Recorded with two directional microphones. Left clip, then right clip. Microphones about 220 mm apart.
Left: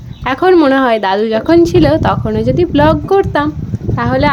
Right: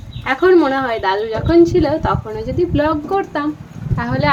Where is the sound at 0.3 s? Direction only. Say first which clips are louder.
Left 3 dB; 45° left (ahead or behind).